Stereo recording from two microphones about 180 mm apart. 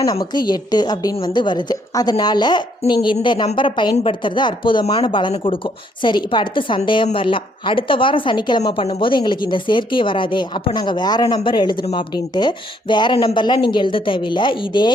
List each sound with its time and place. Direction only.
0.0 s a woman's voice: 20° left (ahead or behind)